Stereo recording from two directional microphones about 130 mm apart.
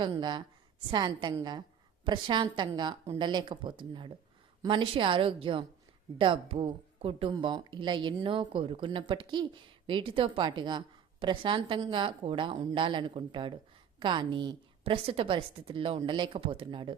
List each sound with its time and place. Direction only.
0.0 s a woman's voice: 35° right (ahead or behind)
7.3 s speech: 35° right (ahead or behind)